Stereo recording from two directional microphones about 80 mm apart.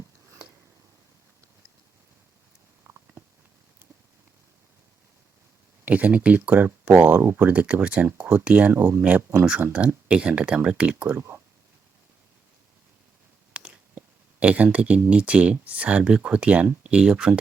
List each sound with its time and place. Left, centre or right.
2.8 s a sound: right
5.8 s speech: centre
8.7 s speech: right
11.1 s speech: right
13.5 s a sound: centre
15.1 s speech: centre